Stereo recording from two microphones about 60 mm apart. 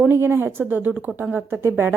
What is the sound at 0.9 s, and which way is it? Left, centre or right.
Speech, right.